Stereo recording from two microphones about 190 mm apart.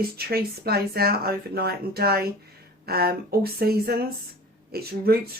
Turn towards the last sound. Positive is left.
turn(degrees=-55)  # may be behind; listen again after turning